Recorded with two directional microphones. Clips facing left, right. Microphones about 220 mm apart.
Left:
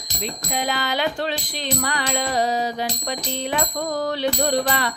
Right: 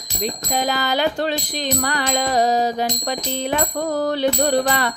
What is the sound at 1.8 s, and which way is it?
Music, 45° right (ahead or behind).